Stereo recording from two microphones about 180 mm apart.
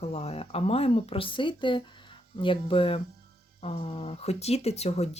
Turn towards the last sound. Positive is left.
turn(degrees=35)  # may be behind; listen again after turning